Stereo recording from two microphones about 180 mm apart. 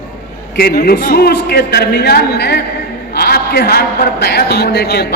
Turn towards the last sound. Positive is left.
turn(degrees=65)  # may be behind; listen again after turning